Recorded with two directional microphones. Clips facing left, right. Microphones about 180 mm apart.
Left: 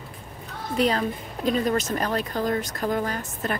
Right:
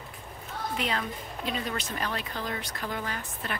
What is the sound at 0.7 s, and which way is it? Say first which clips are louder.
Speech: left 10 dB; 40° left (ahead or behind).